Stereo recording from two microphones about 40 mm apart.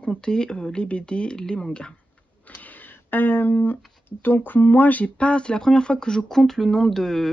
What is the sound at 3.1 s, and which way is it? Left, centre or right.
Speech, left.